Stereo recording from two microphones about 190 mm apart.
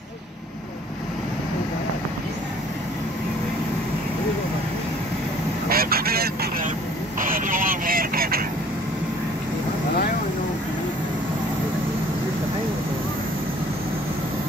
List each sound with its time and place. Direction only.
5.7 s vehicle: 50° right (ahead or behind)